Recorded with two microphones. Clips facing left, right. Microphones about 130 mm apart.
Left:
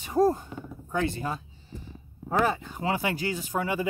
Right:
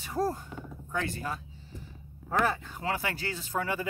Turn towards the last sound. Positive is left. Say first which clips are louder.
# left 3 dB
turn(degrees=15)  # may be behind; listen again after turning